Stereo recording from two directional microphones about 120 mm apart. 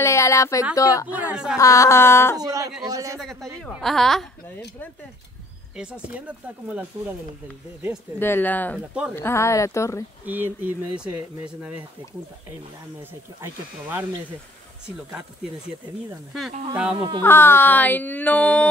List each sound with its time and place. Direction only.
0.0 s speech: 25° left (ahead or behind)
1.0 s speech: 10° right (ahead or behind)
1.6 s speech: 25° left (ahead or behind)
2.3 s a man's voice: 30° right (ahead or behind)
3.2 s a woman's voice: centre (ahead or behind)
5.8 s speech: 10° right (ahead or behind)
8.2 s speech: 15° left (ahead or behind)
10.2 s speech: 15° right (ahead or behind)
13.0 s speech: 15° right (ahead or behind)
16.7 s speech: 5° right (ahead or behind)
17.2 s speech: 20° left (ahead or behind)